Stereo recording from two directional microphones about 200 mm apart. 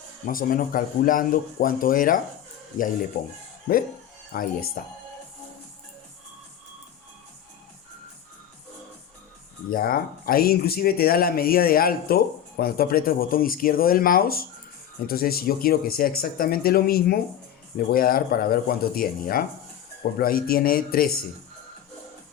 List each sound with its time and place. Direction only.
0.3 s speech: 45° left (ahead or behind)
4.3 s speech: 50° left (ahead or behind)
9.6 s speech: 45° left (ahead or behind)